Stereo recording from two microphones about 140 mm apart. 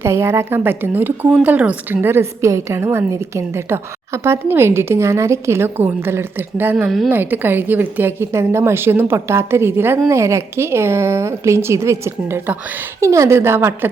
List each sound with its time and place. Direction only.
0.0 s a woman's voice: 20° right (ahead or behind); by 7.1 s centre (ahead or behind)
7.1 s a woman's voice: 15° right (ahead or behind)